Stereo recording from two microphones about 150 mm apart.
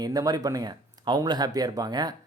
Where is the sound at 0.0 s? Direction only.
25° right (ahead or behind).